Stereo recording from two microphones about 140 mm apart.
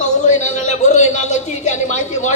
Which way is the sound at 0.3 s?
60° left (ahead or behind).